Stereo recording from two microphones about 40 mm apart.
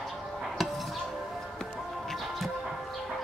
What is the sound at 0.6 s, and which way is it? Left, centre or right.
Music, centre.